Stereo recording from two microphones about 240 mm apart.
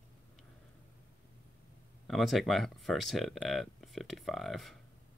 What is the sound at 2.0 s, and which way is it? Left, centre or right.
Speech, centre.